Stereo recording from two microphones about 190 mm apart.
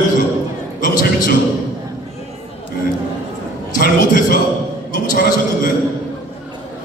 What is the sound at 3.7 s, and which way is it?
A man's voice, 50° left (ahead or behind).